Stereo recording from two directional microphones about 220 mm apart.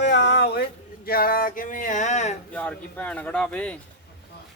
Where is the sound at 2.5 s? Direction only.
5° left (ahead or behind).